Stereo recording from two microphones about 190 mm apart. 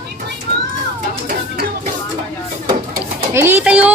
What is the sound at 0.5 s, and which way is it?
Children playing, 55° right (ahead or behind).